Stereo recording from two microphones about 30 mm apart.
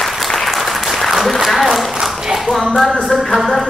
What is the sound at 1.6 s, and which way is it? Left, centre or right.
Speech, centre.